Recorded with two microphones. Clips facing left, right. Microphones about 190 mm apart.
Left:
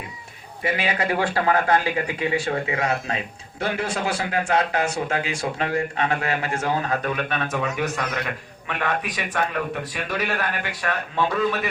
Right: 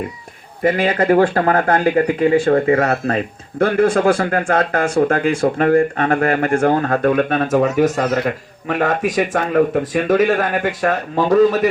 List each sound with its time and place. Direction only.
0.6 s speech: 50° right (ahead or behind)